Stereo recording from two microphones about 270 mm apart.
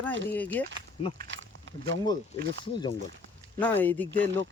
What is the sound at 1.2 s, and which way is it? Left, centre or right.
Speech, right.